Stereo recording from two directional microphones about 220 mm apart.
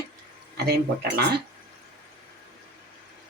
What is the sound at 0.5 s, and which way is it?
Speech, 50° right (ahead or behind).